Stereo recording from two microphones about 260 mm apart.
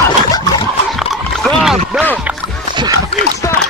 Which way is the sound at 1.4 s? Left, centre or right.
Centre.